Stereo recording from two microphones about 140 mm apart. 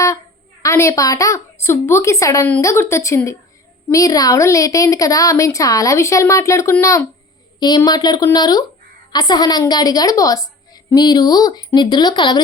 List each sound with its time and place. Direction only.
0.6 s a woman's voice: 20° left (ahead or behind)
7.8 s a woman's voice: 30° left (ahead or behind)